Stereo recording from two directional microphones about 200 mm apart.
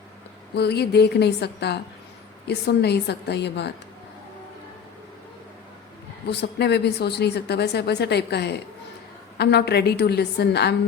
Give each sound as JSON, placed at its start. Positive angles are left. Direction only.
{"t": 0.5, "sound": "a woman's voice", "side_deg": 55}
{"t": 6.2, "sound": "a woman's voice", "side_deg": 55}